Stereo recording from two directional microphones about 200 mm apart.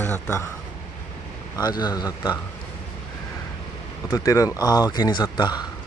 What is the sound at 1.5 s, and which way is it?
Speech, 20° left (ahead or behind).